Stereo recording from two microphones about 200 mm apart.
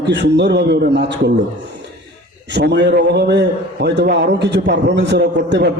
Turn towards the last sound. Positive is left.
turn(degrees=-55)  # may be behind; listen again after turning